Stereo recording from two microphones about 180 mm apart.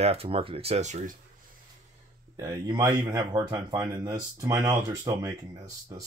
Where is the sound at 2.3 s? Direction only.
20° right (ahead or behind).